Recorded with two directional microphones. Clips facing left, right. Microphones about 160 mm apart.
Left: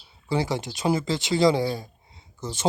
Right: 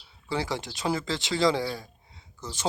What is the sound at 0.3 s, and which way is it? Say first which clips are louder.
Speech: left 4 dB; 15° left (ahead or behind).